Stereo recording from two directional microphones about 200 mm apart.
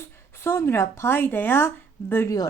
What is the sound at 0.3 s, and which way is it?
A woman's voice, 10° left (ahead or behind).